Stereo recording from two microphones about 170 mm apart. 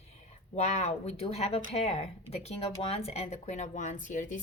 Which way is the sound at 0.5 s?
40° left (ahead or behind).